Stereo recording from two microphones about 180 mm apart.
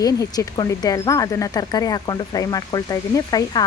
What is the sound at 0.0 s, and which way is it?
A woman's voice, 20° left (ahead or behind).